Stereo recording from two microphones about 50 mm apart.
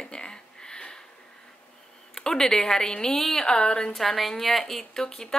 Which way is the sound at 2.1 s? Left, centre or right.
Centre.